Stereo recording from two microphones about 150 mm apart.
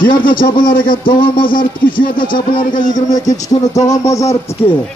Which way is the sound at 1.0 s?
35° left (ahead or behind).